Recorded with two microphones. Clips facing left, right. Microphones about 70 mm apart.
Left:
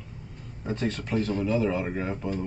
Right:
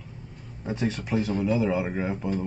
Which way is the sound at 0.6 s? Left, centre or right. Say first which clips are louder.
Right 1 dB; centre.